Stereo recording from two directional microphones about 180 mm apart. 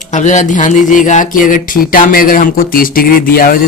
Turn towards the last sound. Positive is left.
turn(degrees=50)  # may be behind; listen again after turning